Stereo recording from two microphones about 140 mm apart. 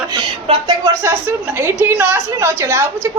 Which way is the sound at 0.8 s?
15° right (ahead or behind).